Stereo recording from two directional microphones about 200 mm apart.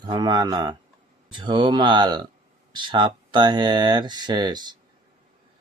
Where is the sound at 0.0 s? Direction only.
20° right (ahead or behind).